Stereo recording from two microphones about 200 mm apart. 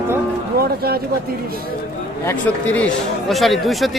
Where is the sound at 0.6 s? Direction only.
50° right (ahead or behind).